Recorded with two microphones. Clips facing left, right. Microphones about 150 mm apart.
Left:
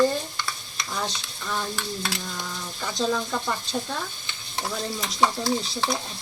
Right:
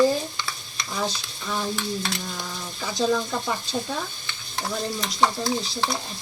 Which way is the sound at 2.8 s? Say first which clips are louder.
Right 3 dB; 5° right (ahead or behind).